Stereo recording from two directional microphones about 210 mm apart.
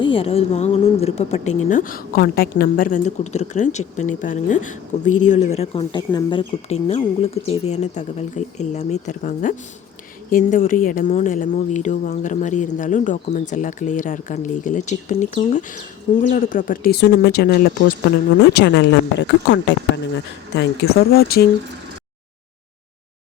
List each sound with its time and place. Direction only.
0.0 s speech: 25° left (ahead or behind)
1.7 s a woman's voice: 40° left (ahead or behind)